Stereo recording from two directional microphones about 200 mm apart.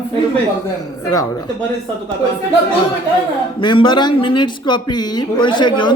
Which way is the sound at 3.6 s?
25° left (ahead or behind).